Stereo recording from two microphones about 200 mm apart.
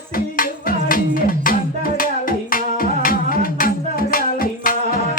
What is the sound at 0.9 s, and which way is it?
Music, 45° left (ahead or behind).